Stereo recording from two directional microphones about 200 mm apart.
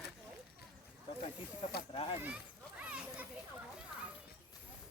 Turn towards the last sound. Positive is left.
turn(degrees=-5)  # may be behind; listen again after turning